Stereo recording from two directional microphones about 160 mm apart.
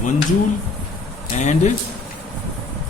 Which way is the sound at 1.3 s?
45° left (ahead or behind).